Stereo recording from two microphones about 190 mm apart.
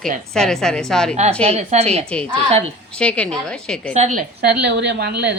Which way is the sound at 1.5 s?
35° right (ahead or behind).